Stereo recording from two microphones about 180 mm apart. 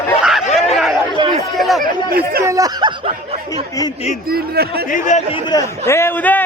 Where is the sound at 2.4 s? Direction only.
20° right (ahead or behind).